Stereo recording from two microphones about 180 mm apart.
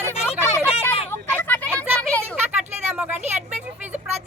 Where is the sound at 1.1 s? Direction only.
10° left (ahead or behind).